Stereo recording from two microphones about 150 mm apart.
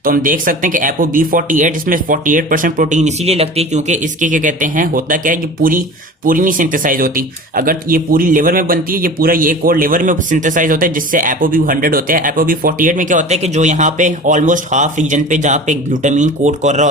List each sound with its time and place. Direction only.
0.0 s a man's voice: 70° right (ahead or behind); by 16.9 s 50° right (ahead or behind)